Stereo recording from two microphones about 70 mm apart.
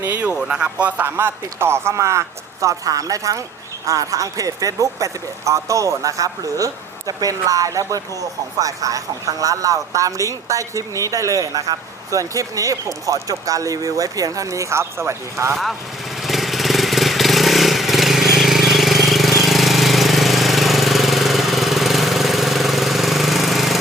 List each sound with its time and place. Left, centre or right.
0.0 s speech: right
0.3 s speech: centre
1.0 s a man's voice: right
16.2 s vehicle: centre